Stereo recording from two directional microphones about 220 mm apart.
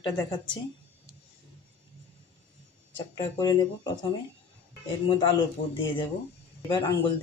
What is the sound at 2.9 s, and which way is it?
Speech, 20° left (ahead or behind).